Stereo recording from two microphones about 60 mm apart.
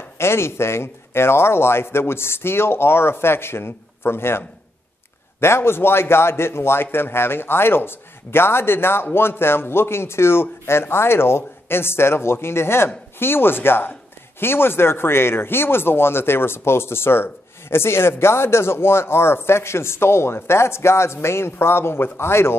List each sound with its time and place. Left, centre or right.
0.2 s a man's voice: left